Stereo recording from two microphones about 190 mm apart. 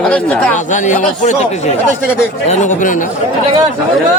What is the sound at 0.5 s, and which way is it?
Speech, 40° left (ahead or behind).